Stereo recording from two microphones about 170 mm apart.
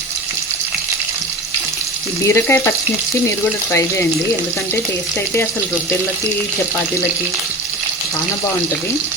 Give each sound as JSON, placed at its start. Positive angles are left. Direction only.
{"t": 2.2, "sound": "frying", "side_deg": 15}
{"t": 3.7, "sound": "frying", "side_deg": 15}